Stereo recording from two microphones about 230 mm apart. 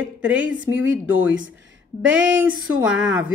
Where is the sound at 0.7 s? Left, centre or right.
Centre.